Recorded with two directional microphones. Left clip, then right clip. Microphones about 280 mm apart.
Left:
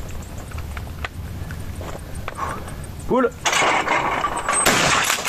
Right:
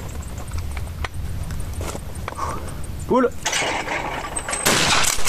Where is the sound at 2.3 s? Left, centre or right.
Centre.